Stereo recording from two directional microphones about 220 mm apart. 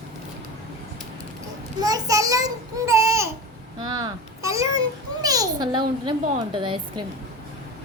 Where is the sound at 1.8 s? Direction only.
15° right (ahead or behind).